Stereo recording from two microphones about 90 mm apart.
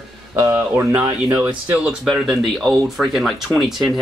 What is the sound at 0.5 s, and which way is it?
Speech, 20° right (ahead or behind).